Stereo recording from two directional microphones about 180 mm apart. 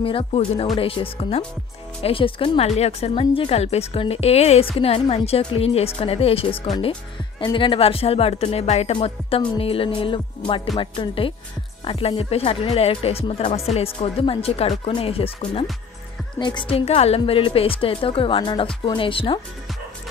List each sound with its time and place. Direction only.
0.0 s speech: 30° left (ahead or behind)